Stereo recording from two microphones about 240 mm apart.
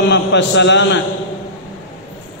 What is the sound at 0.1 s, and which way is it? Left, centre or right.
Mantra, left.